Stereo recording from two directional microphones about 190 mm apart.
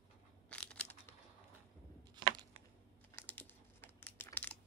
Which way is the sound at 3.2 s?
10° left (ahead or behind).